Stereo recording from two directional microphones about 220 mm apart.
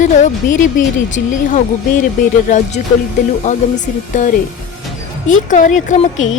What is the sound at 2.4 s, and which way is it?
A woman's voice, 35° left (ahead or behind).